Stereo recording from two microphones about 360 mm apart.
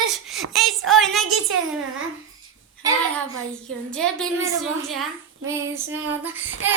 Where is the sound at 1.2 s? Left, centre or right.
Right.